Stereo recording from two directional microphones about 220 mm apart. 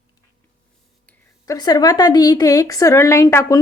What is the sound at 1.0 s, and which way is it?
Speech, 15° left (ahead or behind).